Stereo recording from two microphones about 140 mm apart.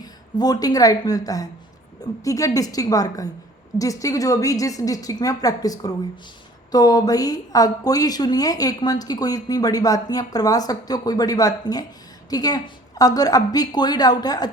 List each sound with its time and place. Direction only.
0.0 s a woman's voice: 30° left (ahead or behind)